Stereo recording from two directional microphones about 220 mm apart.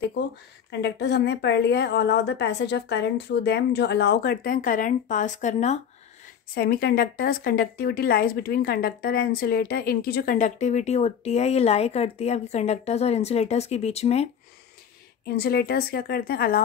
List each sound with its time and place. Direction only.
0.7 s speech: 50° left (ahead or behind); by 5.8 s 30° left (ahead or behind)
6.5 s speech: 45° left (ahead or behind)
15.2 s speech: 45° left (ahead or behind)